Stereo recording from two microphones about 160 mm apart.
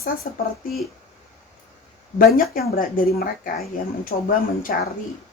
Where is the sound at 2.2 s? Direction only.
65° left (ahead or behind).